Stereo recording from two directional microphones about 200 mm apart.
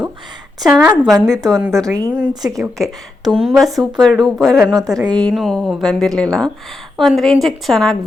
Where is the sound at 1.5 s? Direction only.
Centre (ahead or behind).